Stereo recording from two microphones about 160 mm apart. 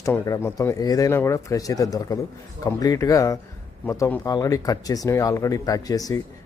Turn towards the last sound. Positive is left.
turn(degrees=20)  # may be behind; listen again after turning